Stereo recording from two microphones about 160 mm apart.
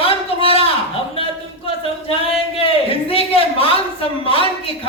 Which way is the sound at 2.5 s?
35° left (ahead or behind).